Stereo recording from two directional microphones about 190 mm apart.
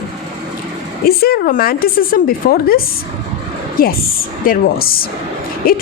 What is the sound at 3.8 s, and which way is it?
A woman's voice, 50° left (ahead or behind).